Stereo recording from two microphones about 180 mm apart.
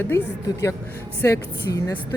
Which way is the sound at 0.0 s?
15° left (ahead or behind).